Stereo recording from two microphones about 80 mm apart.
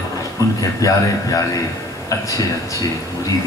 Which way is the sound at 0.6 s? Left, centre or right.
Left.